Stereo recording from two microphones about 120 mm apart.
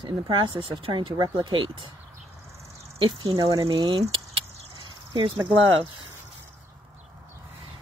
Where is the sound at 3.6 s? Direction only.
45° right (ahead or behind).